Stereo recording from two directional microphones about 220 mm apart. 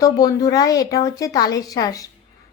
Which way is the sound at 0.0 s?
15° left (ahead or behind).